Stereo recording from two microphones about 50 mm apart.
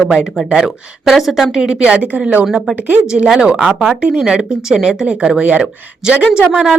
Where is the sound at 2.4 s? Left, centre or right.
Centre; by 6.2 s right.